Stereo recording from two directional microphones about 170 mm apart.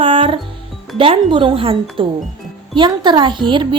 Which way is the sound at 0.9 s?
35° right (ahead or behind).